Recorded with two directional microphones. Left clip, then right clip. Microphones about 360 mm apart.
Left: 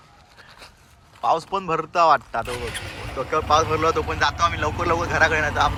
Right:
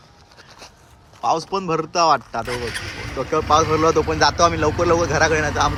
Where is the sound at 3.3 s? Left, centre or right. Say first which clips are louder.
Right 3 dB; centre.